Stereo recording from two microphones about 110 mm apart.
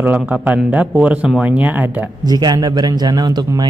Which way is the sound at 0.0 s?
15° right (ahead or behind).